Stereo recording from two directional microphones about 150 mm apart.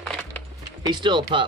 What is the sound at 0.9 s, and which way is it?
Speech, 30° right (ahead or behind).